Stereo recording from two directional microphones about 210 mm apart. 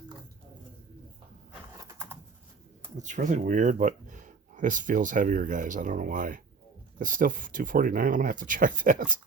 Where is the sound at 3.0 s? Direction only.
35° right (ahead or behind).